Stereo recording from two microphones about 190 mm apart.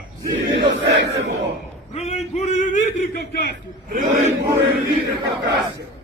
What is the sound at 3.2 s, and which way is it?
Speech, 55° left (ahead or behind).